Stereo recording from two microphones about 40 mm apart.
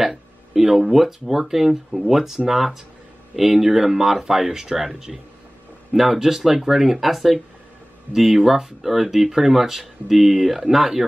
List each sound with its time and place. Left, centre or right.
0.0 s speech: centre